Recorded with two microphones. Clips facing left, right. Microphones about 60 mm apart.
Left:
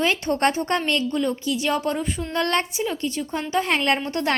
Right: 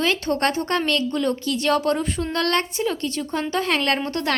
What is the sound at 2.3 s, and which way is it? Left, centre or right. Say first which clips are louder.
A woman's voice: even; centre.